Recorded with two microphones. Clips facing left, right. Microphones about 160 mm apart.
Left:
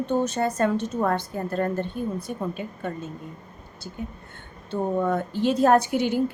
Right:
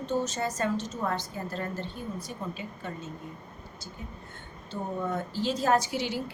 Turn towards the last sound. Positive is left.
turn(degrees=55)  # may be behind; listen again after turning